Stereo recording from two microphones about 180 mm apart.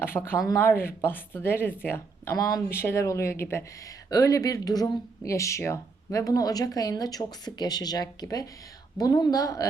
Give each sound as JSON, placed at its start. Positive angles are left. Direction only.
{"t": 0.0, "sound": "a woman's voice", "side_deg": 10}